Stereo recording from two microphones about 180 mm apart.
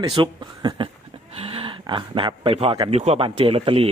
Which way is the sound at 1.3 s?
35° right (ahead or behind).